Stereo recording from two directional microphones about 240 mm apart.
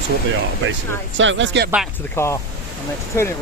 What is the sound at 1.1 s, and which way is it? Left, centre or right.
Speech, right.